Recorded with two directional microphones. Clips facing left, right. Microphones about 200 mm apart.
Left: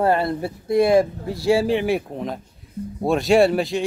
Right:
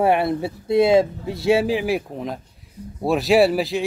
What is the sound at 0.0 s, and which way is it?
Speech, 20° right (ahead or behind).